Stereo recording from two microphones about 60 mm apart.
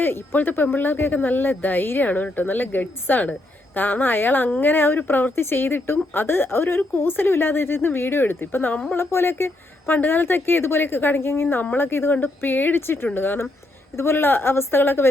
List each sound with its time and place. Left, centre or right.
0.0 s speech: left
8.7 s speech: left
9.0 s speech: left